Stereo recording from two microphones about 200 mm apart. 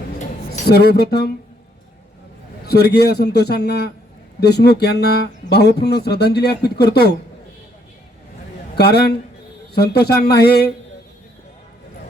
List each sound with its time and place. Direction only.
0.7 s speech: 55° left (ahead or behind)
2.6 s speech: 55° left (ahead or behind)
8.8 s speech: 55° left (ahead or behind)